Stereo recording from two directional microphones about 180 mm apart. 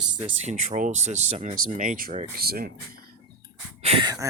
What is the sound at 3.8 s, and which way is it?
Speech, 25° right (ahead or behind).